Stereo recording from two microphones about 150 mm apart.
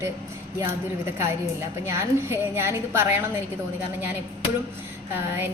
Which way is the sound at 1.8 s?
15° right (ahead or behind).